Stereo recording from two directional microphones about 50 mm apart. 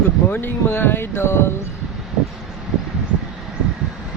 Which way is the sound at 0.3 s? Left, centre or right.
Left.